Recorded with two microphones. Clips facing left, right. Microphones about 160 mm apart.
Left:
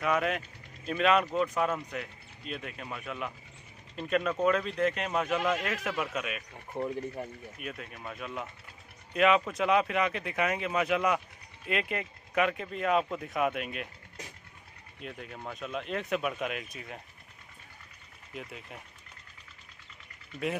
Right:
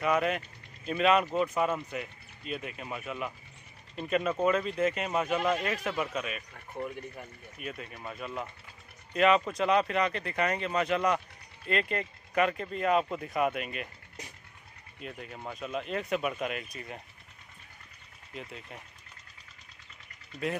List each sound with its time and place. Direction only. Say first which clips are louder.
0.0 s speech: right 1 dB; centre (ahead or behind)
6.7 s speech: left 4 dB; 30° left (ahead or behind)
7.5 s speech: right 5 dB; centre (ahead or behind)
15.0 s speech: even; centre (ahead or behind)
18.3 s speech: even; centre (ahead or behind)